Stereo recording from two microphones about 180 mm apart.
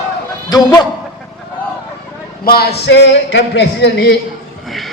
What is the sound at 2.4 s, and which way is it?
Male singing, 60° left (ahead or behind).